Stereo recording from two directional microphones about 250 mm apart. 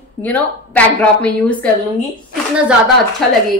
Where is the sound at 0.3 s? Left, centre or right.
Centre.